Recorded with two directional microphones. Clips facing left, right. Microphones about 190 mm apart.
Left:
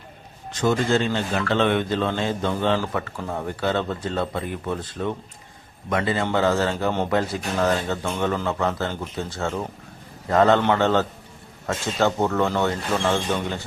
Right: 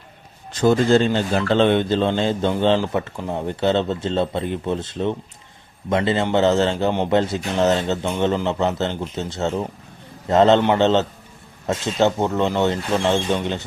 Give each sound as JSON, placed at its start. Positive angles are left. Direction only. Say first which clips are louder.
{"t": 0.6, "sound": "speech", "louder": "right 5 dB", "side_deg": -35}